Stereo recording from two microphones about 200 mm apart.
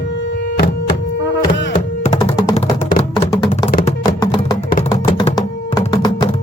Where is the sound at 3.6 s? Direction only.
45° left (ahead or behind).